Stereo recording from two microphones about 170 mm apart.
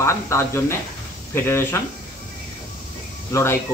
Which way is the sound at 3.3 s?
15° left (ahead or behind).